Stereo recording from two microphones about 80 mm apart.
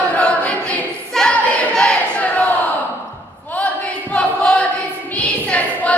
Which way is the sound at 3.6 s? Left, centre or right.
Centre.